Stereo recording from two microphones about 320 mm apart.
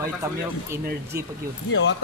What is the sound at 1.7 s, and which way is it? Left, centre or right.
Speech, left.